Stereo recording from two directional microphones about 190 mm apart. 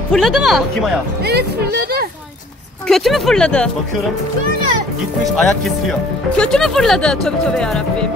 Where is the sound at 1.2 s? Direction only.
60° right (ahead or behind).